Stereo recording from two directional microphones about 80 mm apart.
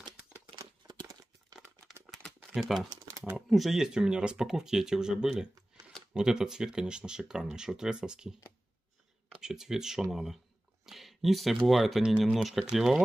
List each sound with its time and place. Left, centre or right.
0.8 s crumpling: right
2.5 s speech: centre
9.4 s speech: centre